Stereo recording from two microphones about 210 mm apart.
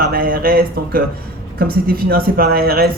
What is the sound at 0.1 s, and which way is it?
Speech, 45° right (ahead or behind).